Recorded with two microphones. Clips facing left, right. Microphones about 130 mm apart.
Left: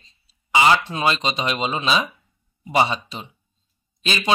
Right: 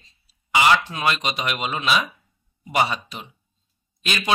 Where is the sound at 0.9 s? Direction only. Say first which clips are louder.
Left 2 dB; 30° left (ahead or behind).